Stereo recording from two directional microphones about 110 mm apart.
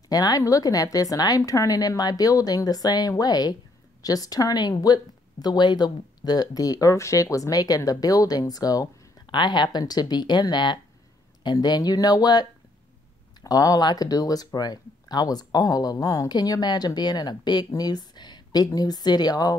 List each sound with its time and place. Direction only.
0.1 s speech: 35° left (ahead or behind)